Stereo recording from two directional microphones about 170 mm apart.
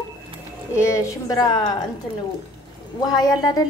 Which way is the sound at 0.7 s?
15° left (ahead or behind).